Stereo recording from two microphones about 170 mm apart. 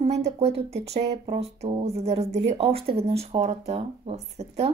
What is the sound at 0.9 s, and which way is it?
Speech, 40° right (ahead or behind).